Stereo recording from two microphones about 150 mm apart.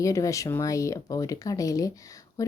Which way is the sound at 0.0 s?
20° left (ahead or behind).